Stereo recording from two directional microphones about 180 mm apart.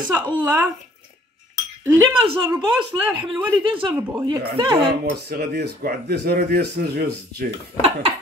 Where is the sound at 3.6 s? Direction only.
25° right (ahead or behind).